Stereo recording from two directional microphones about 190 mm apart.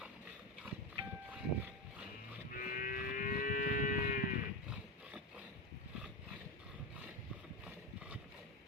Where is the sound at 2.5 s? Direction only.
45° left (ahead or behind).